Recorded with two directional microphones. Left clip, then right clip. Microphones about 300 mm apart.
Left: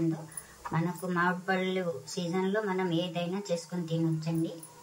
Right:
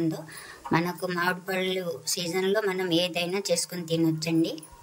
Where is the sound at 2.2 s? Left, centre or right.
Right.